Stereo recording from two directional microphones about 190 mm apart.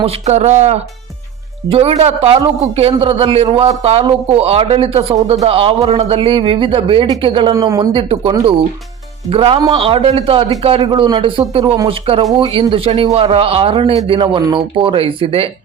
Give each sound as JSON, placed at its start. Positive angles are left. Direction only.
{"t": 0.0, "sound": "a man's voice", "side_deg": -35}